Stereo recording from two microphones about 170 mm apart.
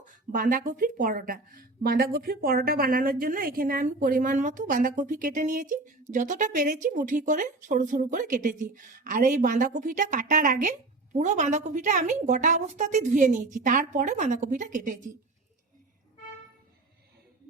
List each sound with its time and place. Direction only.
0.0 s a woman's voice: 50° right (ahead or behind)